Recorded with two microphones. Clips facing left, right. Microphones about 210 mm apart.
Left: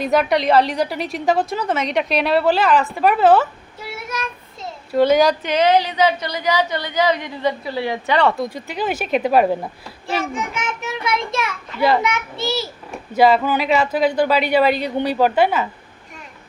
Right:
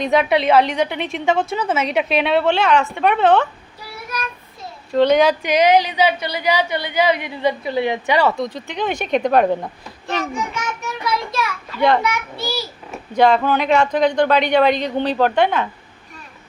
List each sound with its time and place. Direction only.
0.0 s speech: centre (ahead or behind)
3.8 s a sound: 25° left (ahead or behind)
4.9 s speech: 5° left (ahead or behind)
5.4 s a woman's voice: 10° right (ahead or behind)
8.4 s speech: 10° left (ahead or behind)
10.3 s a child's voice: 25° left (ahead or behind)
11.8 s speech: 5° left (ahead or behind)
12.0 s a child's voice: 25° left (ahead or behind)
12.9 s speech: 5° left (ahead or behind)